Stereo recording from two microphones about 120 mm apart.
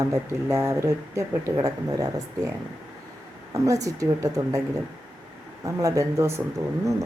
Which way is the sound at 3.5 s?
25° right (ahead or behind).